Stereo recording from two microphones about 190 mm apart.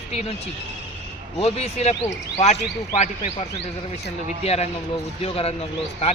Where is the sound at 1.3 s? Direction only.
35° left (ahead or behind).